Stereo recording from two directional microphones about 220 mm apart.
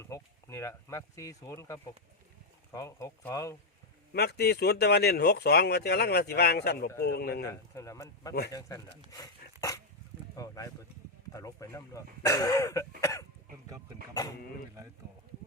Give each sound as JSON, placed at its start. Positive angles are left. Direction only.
{"t": 0.0, "sound": "speech", "side_deg": 10}
{"t": 4.1, "sound": "speech", "side_deg": 45}
{"t": 7.8, "sound": "speech", "side_deg": 15}
{"t": 9.6, "sound": "dog", "side_deg": 15}
{"t": 10.3, "sound": "speech", "side_deg": 15}
{"t": 13.0, "sound": "cough", "side_deg": 15}
{"t": 14.1, "sound": "speech", "side_deg": 15}